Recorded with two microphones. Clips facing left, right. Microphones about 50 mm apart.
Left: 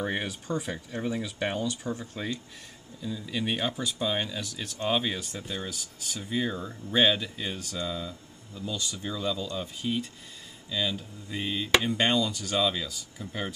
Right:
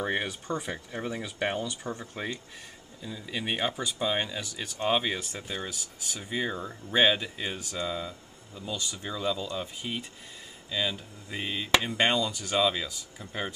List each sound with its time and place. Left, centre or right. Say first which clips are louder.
0.0 s speech: right 1 dB; centre
2.1 s speech: left 1 dB; centre